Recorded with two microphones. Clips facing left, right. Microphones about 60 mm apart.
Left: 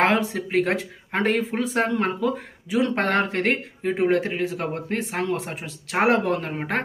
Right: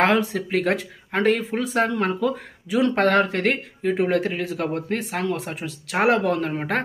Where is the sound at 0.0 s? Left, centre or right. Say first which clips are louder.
Right 1 dB; left.